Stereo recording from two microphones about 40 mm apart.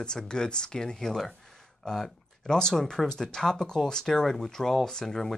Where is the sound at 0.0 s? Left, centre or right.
Centre.